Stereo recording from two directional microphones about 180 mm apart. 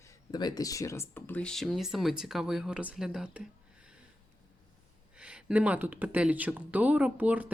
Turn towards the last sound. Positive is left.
turn(degrees=-10)  # may be behind; listen again after turning